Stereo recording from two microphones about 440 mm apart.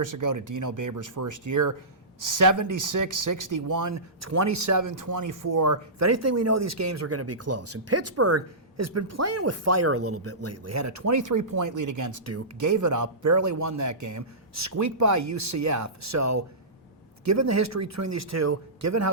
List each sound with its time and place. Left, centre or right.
0.0 s speech: right